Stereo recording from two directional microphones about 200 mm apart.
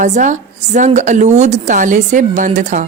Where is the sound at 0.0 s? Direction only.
40° right (ahead or behind).